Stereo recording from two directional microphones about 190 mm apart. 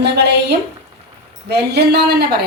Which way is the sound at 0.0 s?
60° right (ahead or behind).